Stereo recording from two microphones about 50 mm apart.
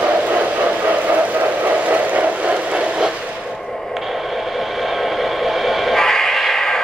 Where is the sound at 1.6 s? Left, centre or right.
Right.